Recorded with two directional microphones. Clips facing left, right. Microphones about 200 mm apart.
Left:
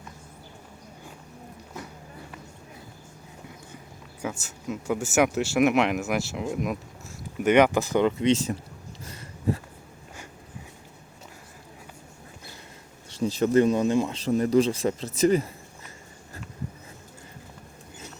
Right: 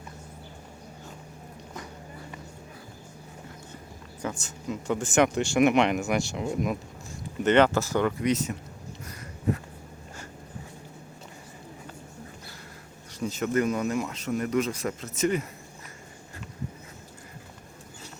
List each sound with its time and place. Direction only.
4.2 s speech: 5° left (ahead or behind)
7.3 s speech: 10° left (ahead or behind); by 8.5 s 30° left (ahead or behind)
13.1 s speech: 30° left (ahead or behind)